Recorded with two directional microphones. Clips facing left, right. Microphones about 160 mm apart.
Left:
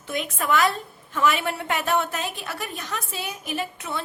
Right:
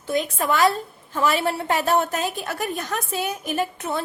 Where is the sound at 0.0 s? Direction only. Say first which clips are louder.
Right 5 dB; 35° right (ahead or behind).